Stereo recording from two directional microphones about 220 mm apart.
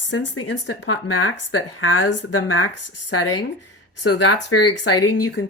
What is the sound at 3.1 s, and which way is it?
Speech, 90° left.